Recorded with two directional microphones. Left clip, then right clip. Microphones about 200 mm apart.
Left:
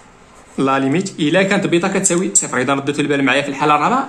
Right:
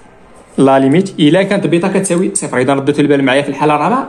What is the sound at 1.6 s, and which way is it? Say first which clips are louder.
A man's voice: right 3 dB; 10° right (ahead or behind).